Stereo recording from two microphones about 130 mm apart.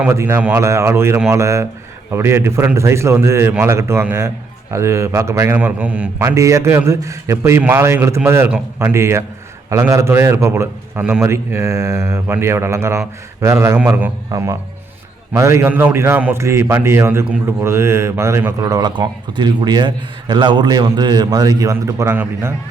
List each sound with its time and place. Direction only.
0.1 s a man's voice: 20° right (ahead or behind)
5.5 s a man's voice: 10° right (ahead or behind)
6.2 s a man's voice: 25° right (ahead or behind)
8.4 s a man's voice: 10° right (ahead or behind)
8.9 s a man's voice: 20° right (ahead or behind)